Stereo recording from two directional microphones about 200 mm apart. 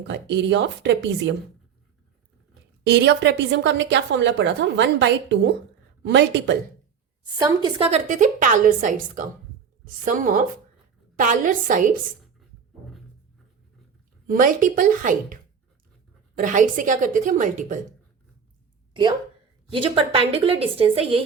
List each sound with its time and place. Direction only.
0.1 s a woman's voice: 60° right (ahead or behind)
2.8 s a woman's voice: 60° right (ahead or behind)
7.3 s a woman's voice: 20° right (ahead or behind)
7.9 s a woman's voice: 35° right (ahead or behind)
14.3 s a woman's voice: 40° right (ahead or behind)
16.4 s a woman's voice: 40° right (ahead or behind)
19.7 s a woman's voice: 25° right (ahead or behind)